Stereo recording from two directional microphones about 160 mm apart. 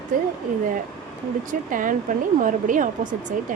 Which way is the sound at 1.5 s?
55° right (ahead or behind).